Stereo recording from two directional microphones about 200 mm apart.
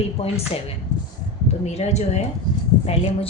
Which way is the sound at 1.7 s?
35° left (ahead or behind).